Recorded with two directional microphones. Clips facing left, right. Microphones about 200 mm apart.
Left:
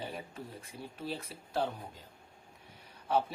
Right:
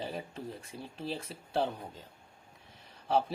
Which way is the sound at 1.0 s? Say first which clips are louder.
Right 2 dB; 30° right (ahead or behind).